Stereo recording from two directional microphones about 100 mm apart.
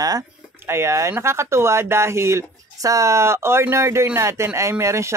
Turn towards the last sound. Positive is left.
turn(degrees=-30)  # may be behind; listen again after turning